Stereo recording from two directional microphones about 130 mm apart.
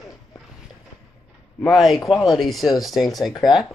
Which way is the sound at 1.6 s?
Centre (ahead or behind).